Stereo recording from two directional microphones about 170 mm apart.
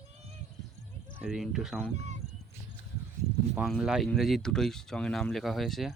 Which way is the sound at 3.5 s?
Centre (ahead or behind).